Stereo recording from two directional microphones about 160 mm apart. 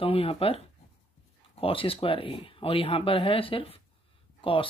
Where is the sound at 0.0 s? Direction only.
35° left (ahead or behind).